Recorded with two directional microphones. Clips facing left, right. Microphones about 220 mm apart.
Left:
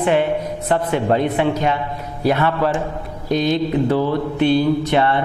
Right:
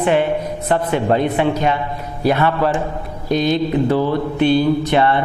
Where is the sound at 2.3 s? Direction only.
20° right (ahead or behind).